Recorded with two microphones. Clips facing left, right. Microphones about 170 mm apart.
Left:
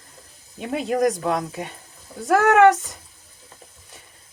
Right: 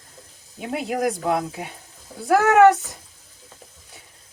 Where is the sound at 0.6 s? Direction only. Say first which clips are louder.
Left 3 dB; 5° right (ahead or behind).